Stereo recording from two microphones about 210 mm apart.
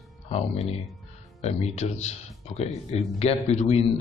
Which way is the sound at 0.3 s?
30° left (ahead or behind).